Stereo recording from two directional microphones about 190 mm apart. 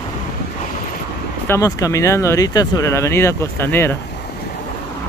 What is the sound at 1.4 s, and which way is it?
Speech, 15° left (ahead or behind).